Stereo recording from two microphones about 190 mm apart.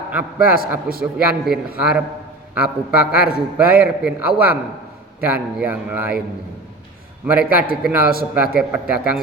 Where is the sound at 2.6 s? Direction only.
5° right (ahead or behind).